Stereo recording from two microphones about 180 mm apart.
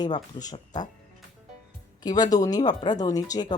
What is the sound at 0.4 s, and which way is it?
Speech, 20° left (ahead or behind).